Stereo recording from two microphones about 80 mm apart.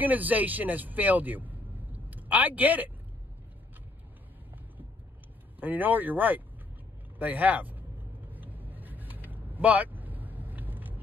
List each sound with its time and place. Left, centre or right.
0.0 s speech: right
5.6 s speech: right
8.3 s vehicle: right